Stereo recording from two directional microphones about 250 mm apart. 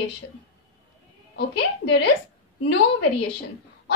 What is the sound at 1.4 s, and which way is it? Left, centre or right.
Speech, left.